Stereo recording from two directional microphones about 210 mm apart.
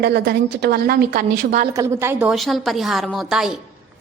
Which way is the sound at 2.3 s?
Centre (ahead or behind).